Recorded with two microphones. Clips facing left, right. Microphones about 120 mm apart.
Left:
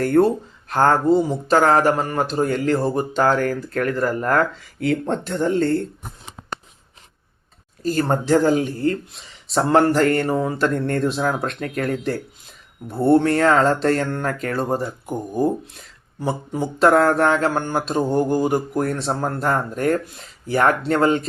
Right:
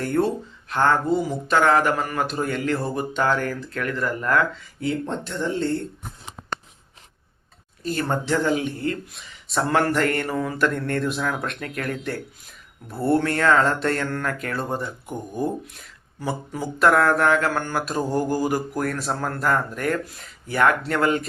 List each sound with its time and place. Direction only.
0.0 s speech: 45° left (ahead or behind)
4.8 s speech: 60° left (ahead or behind)
5.4 s speech: 50° left (ahead or behind)
7.8 s speech: 40° left (ahead or behind)
16.2 s speech: 25° left (ahead or behind)